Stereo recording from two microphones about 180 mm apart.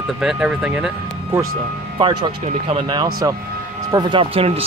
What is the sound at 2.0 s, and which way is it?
Speech, 25° right (ahead or behind).